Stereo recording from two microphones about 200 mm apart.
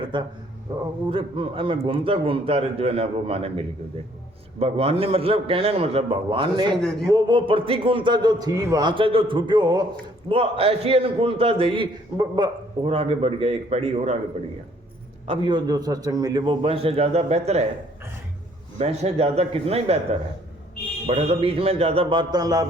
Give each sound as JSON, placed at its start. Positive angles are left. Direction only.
{"t": 0.1, "sound": "a man's voice", "side_deg": -25}
{"t": 6.7, "sound": "speech", "side_deg": 5}
{"t": 7.1, "sound": "a man's voice", "side_deg": -25}
{"t": 15.3, "sound": "a man's voice", "side_deg": -25}
{"t": 18.8, "sound": "a man's voice", "side_deg": -30}
{"t": 21.1, "sound": "a man's voice", "side_deg": -30}